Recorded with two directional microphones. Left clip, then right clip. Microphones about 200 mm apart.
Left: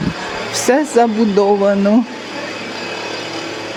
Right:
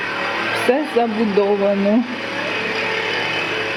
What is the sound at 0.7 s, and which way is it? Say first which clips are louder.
Speech: left 9 dB; 35° left (ahead or behind).